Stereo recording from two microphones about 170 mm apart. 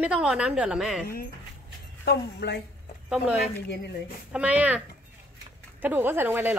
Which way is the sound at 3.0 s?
5° right (ahead or behind).